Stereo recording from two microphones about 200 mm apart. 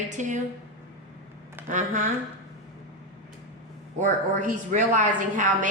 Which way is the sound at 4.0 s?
40° right (ahead or behind).